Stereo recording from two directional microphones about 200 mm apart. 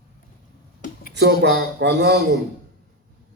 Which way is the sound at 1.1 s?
55° right (ahead or behind).